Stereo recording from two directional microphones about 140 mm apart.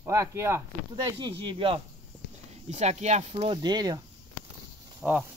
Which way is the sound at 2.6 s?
55° right (ahead or behind).